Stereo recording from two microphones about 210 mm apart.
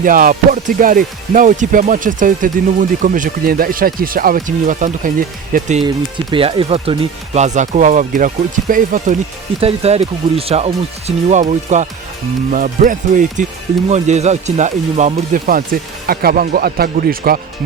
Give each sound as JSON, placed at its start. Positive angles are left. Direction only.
{"t": 0.0, "sound": "speech", "side_deg": -40}
{"t": 9.6, "sound": "speech", "side_deg": -30}